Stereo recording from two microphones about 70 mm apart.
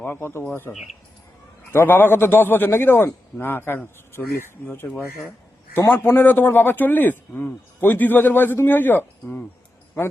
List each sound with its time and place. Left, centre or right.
0.0 s a man's voice: left
0.7 s a man's voice: left
5.9 s speech: left